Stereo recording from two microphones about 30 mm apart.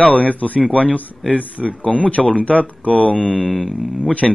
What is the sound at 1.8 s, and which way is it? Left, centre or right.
Speech, left.